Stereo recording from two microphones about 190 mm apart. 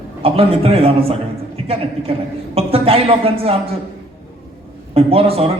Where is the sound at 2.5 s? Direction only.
30° right (ahead or behind).